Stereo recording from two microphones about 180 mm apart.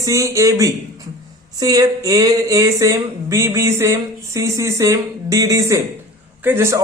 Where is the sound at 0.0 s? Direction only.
20° right (ahead or behind).